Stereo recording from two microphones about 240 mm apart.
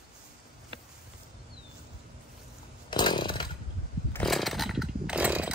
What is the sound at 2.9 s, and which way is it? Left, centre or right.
Chainsaw, centre.